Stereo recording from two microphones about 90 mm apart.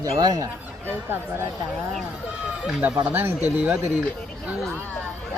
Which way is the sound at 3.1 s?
20° right (ahead or behind).